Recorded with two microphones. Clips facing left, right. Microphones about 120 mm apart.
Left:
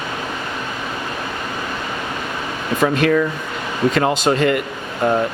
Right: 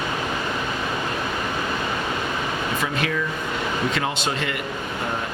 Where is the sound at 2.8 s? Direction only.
55° left (ahead or behind).